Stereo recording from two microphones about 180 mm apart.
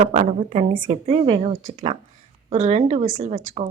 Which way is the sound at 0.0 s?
40° right (ahead or behind).